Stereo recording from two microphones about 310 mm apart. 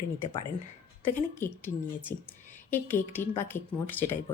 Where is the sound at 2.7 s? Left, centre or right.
Centre.